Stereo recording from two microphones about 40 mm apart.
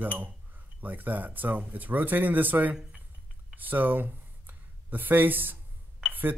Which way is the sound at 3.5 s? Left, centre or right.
Right.